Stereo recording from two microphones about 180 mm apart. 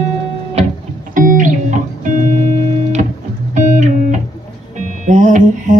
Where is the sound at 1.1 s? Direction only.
50° right (ahead or behind).